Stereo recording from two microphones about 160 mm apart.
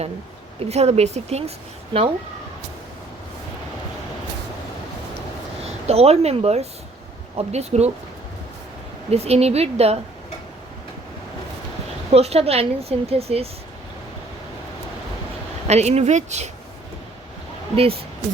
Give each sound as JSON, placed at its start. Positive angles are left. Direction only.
{"t": 0.6, "sound": "speech", "side_deg": -40}
{"t": 5.6, "sound": "speech", "side_deg": -40}
{"t": 9.0, "sound": "speech", "side_deg": -40}
{"t": 12.1, "sound": "speech", "side_deg": -40}
{"t": 15.6, "sound": "speech", "side_deg": -45}